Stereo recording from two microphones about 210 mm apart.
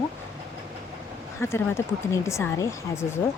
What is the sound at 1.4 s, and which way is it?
Speech, 10° left (ahead or behind).